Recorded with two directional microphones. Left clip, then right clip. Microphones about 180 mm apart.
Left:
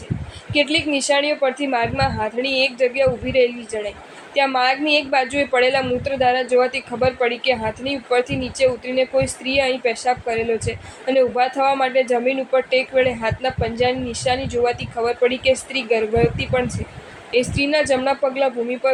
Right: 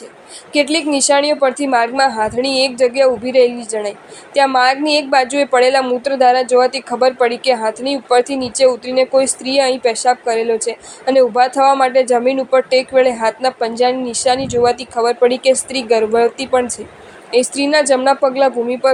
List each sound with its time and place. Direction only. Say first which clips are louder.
0.5 s a woman's voice: right 3 dB; 35° right (ahead or behind)